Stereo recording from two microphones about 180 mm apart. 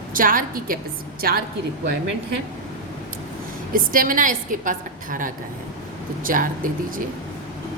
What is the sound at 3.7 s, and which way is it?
A woman's voice, 50° right (ahead or behind).